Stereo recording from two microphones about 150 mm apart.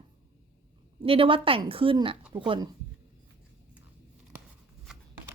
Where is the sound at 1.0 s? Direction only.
35° right (ahead or behind).